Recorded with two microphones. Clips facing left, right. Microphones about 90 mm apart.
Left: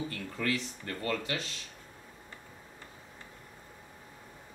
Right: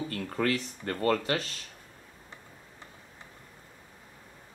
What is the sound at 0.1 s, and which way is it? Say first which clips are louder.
Speech: right 4 dB; 50° right (ahead or behind).